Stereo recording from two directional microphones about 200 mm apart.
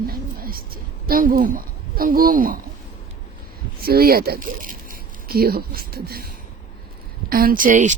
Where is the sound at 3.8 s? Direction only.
50° right (ahead or behind).